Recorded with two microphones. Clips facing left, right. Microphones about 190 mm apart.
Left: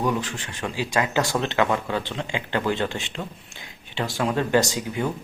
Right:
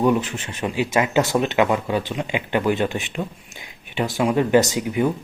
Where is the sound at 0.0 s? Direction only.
20° right (ahead or behind).